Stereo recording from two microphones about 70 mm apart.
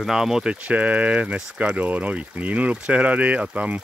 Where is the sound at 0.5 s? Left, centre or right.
Centre.